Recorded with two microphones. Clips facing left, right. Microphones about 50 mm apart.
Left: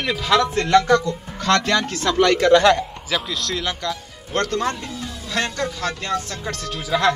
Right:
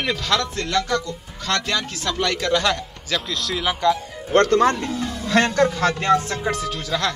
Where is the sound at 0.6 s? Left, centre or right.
Centre.